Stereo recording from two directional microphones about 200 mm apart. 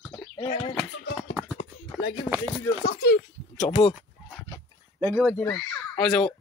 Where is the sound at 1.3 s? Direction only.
5° left (ahead or behind).